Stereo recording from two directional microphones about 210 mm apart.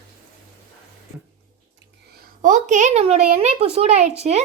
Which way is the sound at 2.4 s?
35° right (ahead or behind).